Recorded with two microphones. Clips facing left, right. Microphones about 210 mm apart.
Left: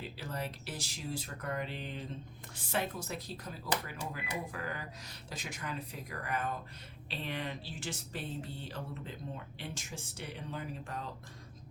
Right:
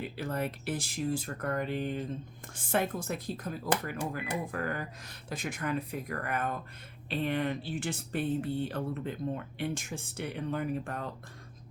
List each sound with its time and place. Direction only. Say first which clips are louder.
0.0 s speech: right 7 dB; 55° right (ahead or behind)